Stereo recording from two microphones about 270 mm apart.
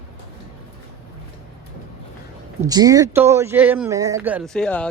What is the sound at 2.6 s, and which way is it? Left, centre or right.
Speech, centre.